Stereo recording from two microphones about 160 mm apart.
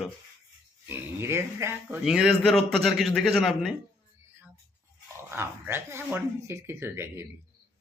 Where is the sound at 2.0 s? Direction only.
5° right (ahead or behind).